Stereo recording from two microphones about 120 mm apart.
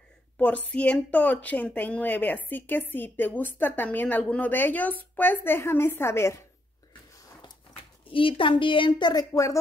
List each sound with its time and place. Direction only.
0.4 s a woman's voice: 10° left (ahead or behind)
8.1 s a woman's voice: 45° left (ahead or behind); by 9.6 s 25° left (ahead or behind)